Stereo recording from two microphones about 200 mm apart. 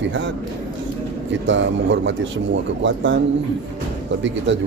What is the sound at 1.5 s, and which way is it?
A man's voice, 65° right (ahead or behind).